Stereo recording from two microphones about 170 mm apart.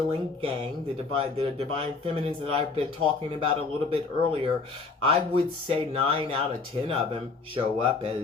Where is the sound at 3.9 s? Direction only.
30° right (ahead or behind).